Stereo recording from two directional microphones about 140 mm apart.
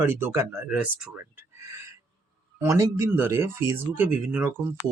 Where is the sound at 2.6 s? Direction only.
20° right (ahead or behind).